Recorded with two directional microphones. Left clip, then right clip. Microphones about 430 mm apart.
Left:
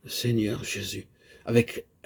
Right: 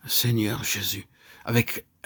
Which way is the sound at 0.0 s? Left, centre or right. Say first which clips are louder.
Right 2 dB; right.